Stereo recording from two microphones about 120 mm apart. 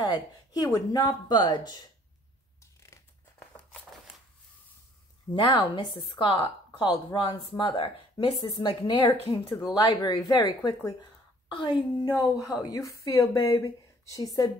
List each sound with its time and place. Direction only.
0.0 s speech: 35° left (ahead or behind)
2.6 s a sound: 25° left (ahead or behind)
3.3 s a sound: 5° left (ahead or behind)
5.3 s speech: 30° left (ahead or behind)
5.8 s a woman's voice: 45° left (ahead or behind)
6.4 s speech: 35° left (ahead or behind)
9.8 s speech: 35° left (ahead or behind)
12.1 s speech: 30° left (ahead or behind)